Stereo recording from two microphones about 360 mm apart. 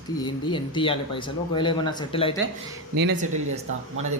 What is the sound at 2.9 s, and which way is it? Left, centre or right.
Speech, right.